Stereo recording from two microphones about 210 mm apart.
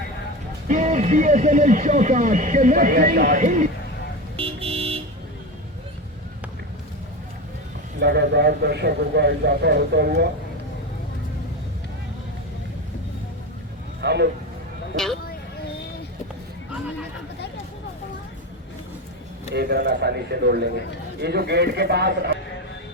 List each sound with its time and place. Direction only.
0.7 s speech: 35° right (ahead or behind)
4.4 s vehicle: 25° right (ahead or behind)
7.9 s a man's voice: 55° right (ahead or behind)
14.0 s speech: 50° right (ahead or behind)
14.9 s speech: centre (ahead or behind)
19.5 s a man's voice: 50° right (ahead or behind)